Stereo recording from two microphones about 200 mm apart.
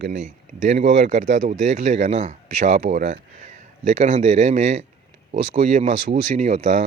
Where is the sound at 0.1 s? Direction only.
35° right (ahead or behind).